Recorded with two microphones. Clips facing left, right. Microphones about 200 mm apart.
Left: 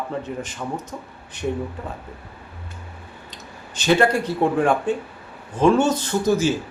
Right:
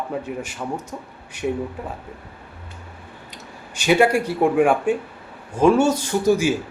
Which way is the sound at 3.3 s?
10° right (ahead or behind).